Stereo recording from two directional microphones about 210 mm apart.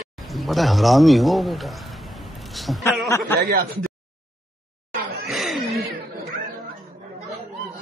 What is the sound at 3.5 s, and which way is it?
Speech, 45° right (ahead or behind).